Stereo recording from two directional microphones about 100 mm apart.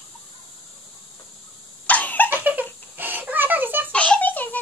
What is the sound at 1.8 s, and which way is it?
Cough, 15° left (ahead or behind).